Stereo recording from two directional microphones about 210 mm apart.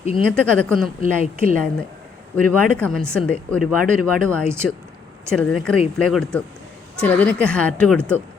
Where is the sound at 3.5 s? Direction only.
90° left.